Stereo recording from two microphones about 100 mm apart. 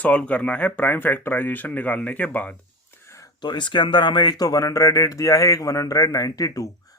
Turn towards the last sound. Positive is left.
turn(degrees=35)  # may be behind; listen again after turning